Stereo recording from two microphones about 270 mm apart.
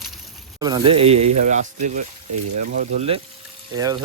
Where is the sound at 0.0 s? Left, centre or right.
Centre.